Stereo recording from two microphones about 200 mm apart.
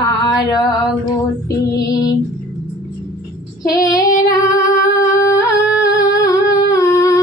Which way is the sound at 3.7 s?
15° left (ahead or behind).